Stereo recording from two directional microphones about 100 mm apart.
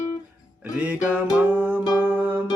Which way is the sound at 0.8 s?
15° right (ahead or behind).